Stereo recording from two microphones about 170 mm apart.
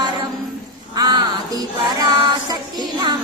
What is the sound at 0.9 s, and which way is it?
Child singing, 25° right (ahead or behind).